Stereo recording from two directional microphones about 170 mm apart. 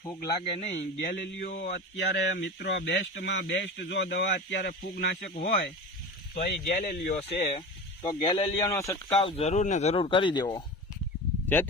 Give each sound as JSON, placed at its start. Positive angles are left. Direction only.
{"t": 0.4, "sound": "speech", "side_deg": 40}
{"t": 0.8, "sound": "speech", "side_deg": 85}
{"t": 1.1, "sound": "speech", "side_deg": 55}
{"t": 5.3, "sound": "speech", "side_deg": 55}
{"t": 8.0, "sound": "speech", "side_deg": 30}
{"t": 9.0, "sound": "speech", "side_deg": 35}
{"t": 11.4, "sound": "speech", "side_deg": 10}